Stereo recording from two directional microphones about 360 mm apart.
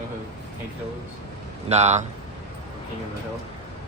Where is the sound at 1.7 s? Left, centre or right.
Centre.